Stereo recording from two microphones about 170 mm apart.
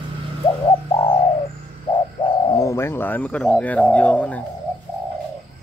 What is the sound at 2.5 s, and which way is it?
Speech, 15° left (ahead or behind).